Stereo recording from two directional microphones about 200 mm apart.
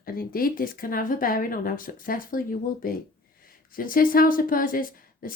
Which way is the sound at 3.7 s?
45° left (ahead or behind).